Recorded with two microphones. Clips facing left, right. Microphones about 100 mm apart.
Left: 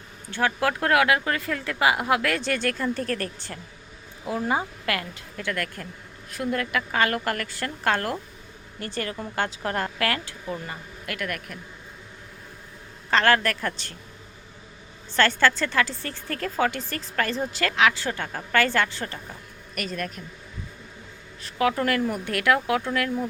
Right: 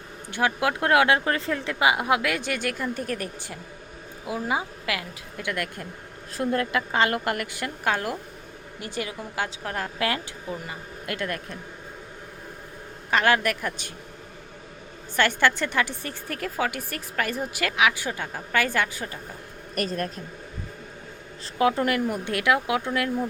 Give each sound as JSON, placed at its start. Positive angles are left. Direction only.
{"t": 0.3, "sound": "a woman's voice", "side_deg": -15}
{"t": 5.4, "sound": "a woman's voice", "side_deg": -15}
{"t": 6.3, "sound": "a woman's voice", "side_deg": -30}
{"t": 10.0, "sound": "a woman's voice", "side_deg": -20}
{"t": 13.1, "sound": "a woman's voice", "side_deg": -10}
{"t": 15.1, "sound": "a woman's voice", "side_deg": -15}
{"t": 19.7, "sound": "speech", "side_deg": -35}
{"t": 21.4, "sound": "a woman's voice", "side_deg": -25}